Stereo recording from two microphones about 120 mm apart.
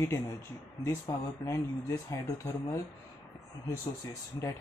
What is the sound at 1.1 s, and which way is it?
Speech, 35° left (ahead or behind).